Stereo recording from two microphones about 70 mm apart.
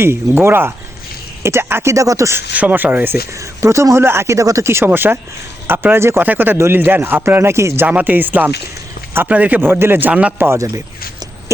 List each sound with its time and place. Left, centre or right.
0.0 s speech: right
2.6 s speech: right
3.6 s speech: right
4.9 s speech: right
7.9 s speech: right
10.1 s speech: centre
10.3 s speech: right